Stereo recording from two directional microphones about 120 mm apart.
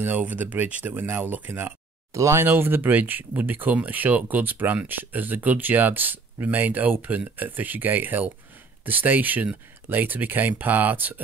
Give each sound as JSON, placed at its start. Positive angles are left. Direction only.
{"t": 0.0, "sound": "speech", "side_deg": -15}